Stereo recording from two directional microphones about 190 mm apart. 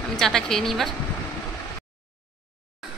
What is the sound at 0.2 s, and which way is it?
Speech, centre (ahead or behind).